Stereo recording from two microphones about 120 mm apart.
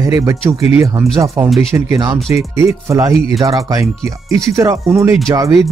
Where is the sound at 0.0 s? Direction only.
30° right (ahead or behind).